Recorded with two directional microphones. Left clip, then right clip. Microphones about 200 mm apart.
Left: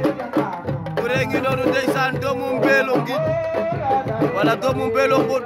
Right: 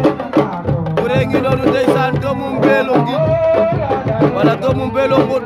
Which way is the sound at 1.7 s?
Centre (ahead or behind).